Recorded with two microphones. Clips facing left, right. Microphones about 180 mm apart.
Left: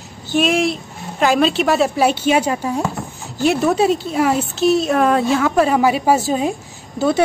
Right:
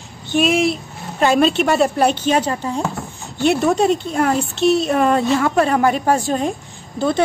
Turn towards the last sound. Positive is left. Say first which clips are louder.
# left 2 dB
turn(degrees=5)  # may be behind; listen again after turning